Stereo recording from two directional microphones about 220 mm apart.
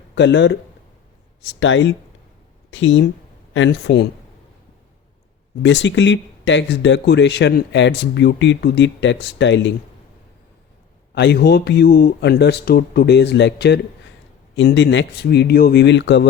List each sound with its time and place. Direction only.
0.2 s speech: 50° left (ahead or behind)
5.6 s speech: 55° left (ahead or behind)
11.1 s speech: 50° left (ahead or behind)